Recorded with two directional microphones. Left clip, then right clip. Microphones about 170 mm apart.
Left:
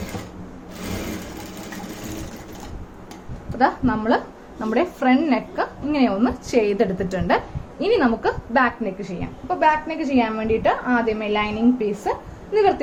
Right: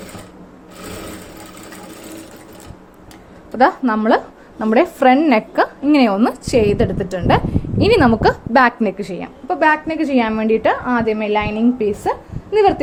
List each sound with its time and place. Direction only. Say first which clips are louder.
3.6 s a woman's voice: right 6 dB; 50° right (ahead or behind); by 7.4 s 35° right (ahead or behind)
7.8 s a woman's voice: right 6 dB; 55° right (ahead or behind)